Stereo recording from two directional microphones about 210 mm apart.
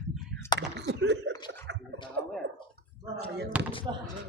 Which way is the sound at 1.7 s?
55° right (ahead or behind).